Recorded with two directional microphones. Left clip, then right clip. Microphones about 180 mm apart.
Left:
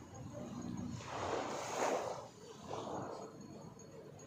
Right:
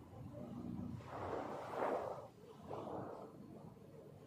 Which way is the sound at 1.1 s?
30° left (ahead or behind).